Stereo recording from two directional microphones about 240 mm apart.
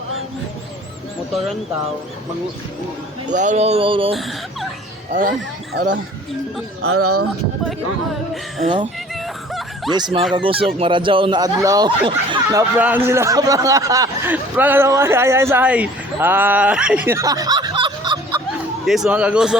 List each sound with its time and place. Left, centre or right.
3.2 s speech: right
5.7 s speech: right
6.8 s speech: right
9.5 s snicker: centre
9.9 s speech: right
18.9 s speech: centre